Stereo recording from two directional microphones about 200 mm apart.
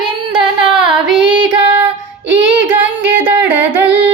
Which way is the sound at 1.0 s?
5° right (ahead or behind).